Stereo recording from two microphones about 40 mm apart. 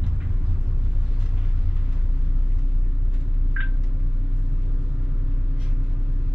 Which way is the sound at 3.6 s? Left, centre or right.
Right.